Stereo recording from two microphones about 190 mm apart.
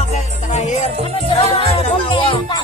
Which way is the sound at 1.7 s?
25° left (ahead or behind).